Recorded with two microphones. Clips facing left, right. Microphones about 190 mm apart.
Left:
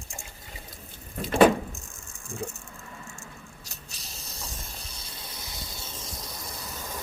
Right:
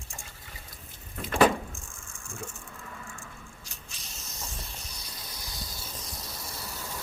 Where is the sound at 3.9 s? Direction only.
35° left (ahead or behind).